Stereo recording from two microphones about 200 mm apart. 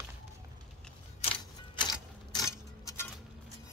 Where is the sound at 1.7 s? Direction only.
20° left (ahead or behind).